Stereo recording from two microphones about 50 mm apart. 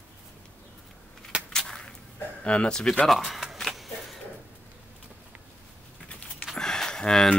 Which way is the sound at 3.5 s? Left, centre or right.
Centre.